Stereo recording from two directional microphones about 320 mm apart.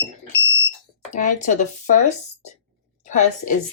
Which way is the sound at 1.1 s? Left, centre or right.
Left.